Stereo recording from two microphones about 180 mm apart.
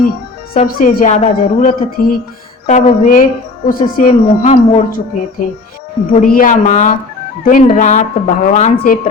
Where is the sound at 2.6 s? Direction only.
40° left (ahead or behind).